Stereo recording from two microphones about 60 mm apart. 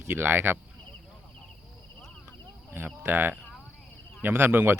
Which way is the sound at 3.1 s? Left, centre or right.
Right.